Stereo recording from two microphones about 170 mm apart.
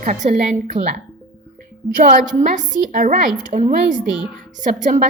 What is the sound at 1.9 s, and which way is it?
A woman's voice, 50° right (ahead or behind).